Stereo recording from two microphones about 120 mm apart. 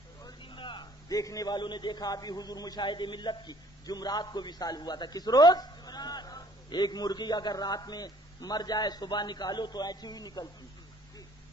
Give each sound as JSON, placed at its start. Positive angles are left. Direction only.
{"t": 0.2, "sound": "a man's voice", "side_deg": 40}